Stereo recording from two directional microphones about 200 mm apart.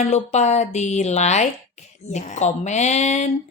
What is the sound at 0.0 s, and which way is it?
Speech, 35° left (ahead or behind).